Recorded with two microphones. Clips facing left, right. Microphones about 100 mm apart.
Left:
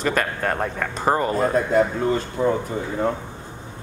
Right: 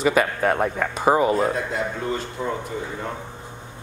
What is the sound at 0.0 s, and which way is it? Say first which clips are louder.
Speech: right 3 dB; 5° right (ahead or behind).